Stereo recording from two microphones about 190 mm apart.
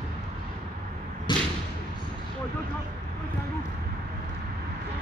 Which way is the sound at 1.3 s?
25° left (ahead or behind).